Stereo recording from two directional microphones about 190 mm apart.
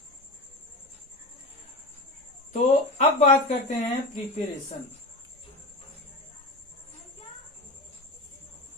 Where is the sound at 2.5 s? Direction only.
40° left (ahead or behind).